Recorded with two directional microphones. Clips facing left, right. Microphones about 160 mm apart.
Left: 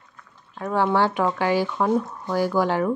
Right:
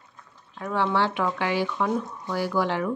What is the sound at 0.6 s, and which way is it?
A woman's voice, 40° left (ahead or behind).